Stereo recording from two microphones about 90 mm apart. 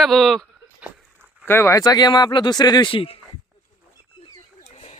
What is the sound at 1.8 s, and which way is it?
Speech, 45° left (ahead or behind).